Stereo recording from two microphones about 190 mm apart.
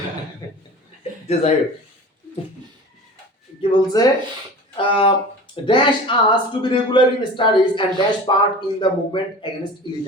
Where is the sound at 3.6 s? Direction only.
20° left (ahead or behind).